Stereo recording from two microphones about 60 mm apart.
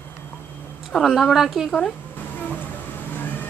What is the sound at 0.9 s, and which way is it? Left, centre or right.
Speech, centre.